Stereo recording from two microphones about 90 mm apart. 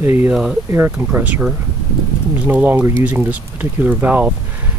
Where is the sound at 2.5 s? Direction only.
20° right (ahead or behind).